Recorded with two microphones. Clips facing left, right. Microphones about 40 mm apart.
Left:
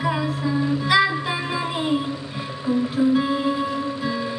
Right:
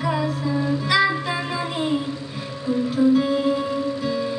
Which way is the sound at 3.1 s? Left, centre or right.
Centre.